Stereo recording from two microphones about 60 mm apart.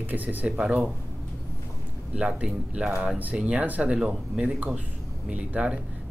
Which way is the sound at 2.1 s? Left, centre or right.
Right.